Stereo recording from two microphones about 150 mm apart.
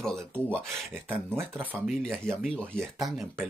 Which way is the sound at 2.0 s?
Centre (ahead or behind).